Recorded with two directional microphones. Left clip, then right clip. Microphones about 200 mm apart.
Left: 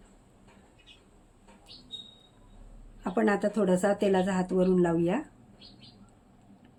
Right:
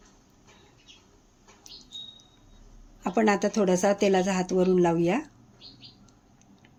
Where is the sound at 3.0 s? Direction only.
20° right (ahead or behind).